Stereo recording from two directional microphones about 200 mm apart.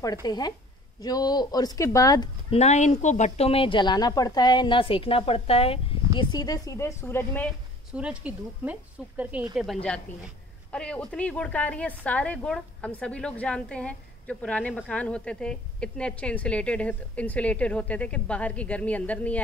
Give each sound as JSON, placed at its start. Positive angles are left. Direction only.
{"t": 0.0, "sound": "speech", "side_deg": 20}
{"t": 2.5, "sound": "speech", "side_deg": 35}
{"t": 6.1, "sound": "a woman's voice", "side_deg": 20}
{"t": 7.9, "sound": "a woman's voice", "side_deg": -5}